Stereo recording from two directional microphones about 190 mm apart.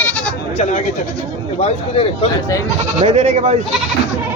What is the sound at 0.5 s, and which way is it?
Speech, 40° left (ahead or behind).